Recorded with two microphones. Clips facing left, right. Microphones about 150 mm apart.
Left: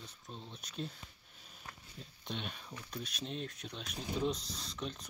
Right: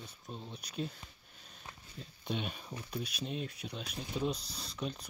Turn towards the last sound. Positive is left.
turn(degrees=-5)  # may be behind; listen again after turning